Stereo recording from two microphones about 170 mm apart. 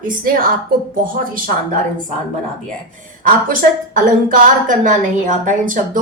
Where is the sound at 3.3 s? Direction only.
55° right (ahead or behind).